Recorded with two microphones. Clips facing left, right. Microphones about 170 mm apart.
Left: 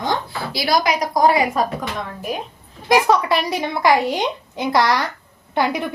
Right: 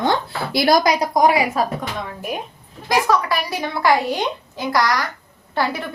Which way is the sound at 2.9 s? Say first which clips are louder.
Left 3 dB; 20° left (ahead or behind).